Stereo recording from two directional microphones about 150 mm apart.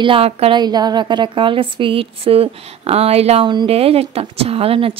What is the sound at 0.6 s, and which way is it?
Speech, 25° right (ahead or behind).